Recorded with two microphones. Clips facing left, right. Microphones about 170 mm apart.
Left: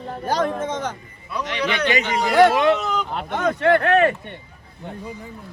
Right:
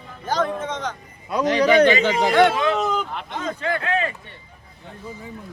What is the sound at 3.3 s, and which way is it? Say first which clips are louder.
Speech: left 8 dB; 65° left (ahead or behind).